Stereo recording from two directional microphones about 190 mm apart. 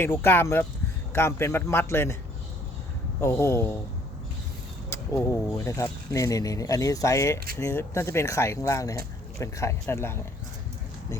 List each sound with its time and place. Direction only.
0.0 s speech: 10° left (ahead or behind)
3.2 s speech: 15° left (ahead or behind)
4.9 s a sound: 15° left (ahead or behind)
5.5 s speech: 15° left (ahead or behind)